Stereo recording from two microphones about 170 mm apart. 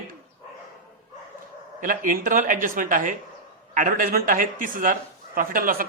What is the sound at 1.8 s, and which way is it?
Speech, 50° right (ahead or behind).